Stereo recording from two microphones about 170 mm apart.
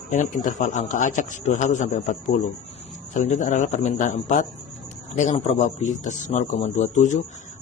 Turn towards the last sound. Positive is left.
turn(degrees=45)  # may be behind; listen again after turning